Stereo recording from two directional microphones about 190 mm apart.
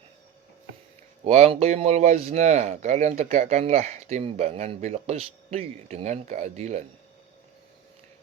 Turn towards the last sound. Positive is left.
turn(degrees=-35)  # may be behind; listen again after turning